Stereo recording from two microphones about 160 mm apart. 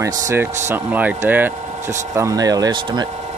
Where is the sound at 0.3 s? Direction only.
15° right (ahead or behind).